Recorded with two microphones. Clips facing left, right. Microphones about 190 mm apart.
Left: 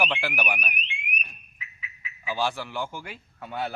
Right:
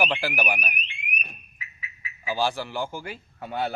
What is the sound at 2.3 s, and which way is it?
A man's voice, 35° right (ahead or behind).